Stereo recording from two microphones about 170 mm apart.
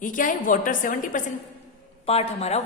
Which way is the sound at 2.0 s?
35° left (ahead or behind).